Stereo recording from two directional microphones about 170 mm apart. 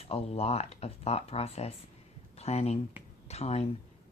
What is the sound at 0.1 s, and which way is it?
Speech, 35° left (ahead or behind).